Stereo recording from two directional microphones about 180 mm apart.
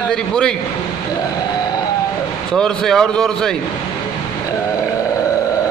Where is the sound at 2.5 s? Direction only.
5° left (ahead or behind).